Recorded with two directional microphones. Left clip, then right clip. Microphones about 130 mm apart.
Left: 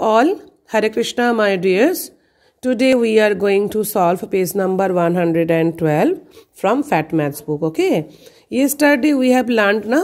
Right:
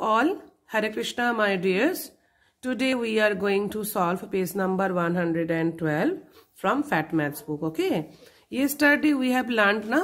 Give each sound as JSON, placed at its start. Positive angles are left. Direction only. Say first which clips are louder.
{"t": 0.0, "sound": "speech", "louder": "left 9 dB", "side_deg": 50}
{"t": 6.6, "sound": "speech", "louder": "left 8 dB", "side_deg": 50}